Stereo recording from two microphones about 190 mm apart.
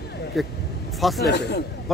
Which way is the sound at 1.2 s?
60° left (ahead or behind).